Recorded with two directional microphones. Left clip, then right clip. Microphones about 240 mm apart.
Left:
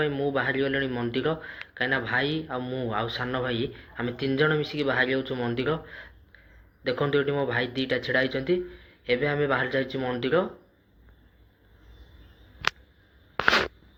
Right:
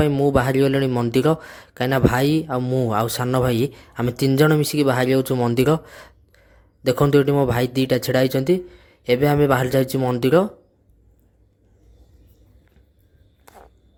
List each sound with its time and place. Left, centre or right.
0.0 s speech: right